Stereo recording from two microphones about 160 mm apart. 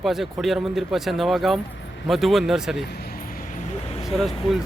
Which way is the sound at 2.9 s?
75° left (ahead or behind).